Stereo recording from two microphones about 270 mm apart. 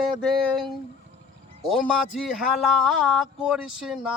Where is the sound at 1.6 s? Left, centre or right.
Centre.